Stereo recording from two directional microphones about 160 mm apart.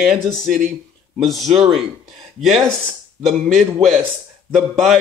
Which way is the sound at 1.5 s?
40° right (ahead or behind).